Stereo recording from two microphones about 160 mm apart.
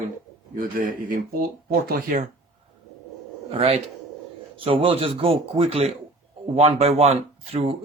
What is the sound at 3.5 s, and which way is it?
Speech, 40° right (ahead or behind).